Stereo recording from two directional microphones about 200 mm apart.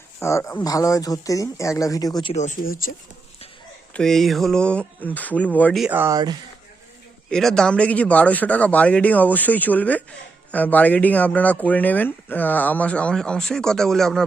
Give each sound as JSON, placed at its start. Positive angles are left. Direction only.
{"t": 0.2, "sound": "speech", "side_deg": 15}
{"t": 2.3, "sound": "speech", "side_deg": 35}
{"t": 3.9, "sound": "speech", "side_deg": 0}
{"t": 5.8, "sound": "speech", "side_deg": -10}
{"t": 7.3, "sound": "speech", "side_deg": 5}